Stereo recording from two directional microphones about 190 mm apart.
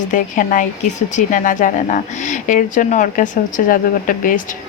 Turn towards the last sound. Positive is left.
turn(degrees=45)  # may be behind; listen again after turning